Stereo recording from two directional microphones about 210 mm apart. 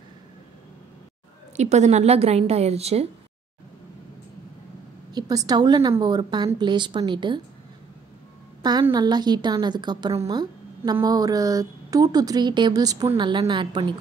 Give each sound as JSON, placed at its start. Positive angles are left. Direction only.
{"t": 1.6, "sound": "a woman's voice", "side_deg": -35}
{"t": 5.1, "sound": "a woman's voice", "side_deg": -15}
{"t": 8.6, "sound": "a woman's voice", "side_deg": -20}